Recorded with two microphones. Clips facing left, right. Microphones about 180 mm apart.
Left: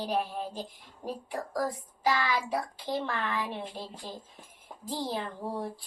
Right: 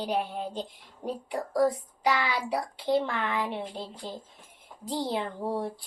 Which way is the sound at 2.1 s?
20° right (ahead or behind).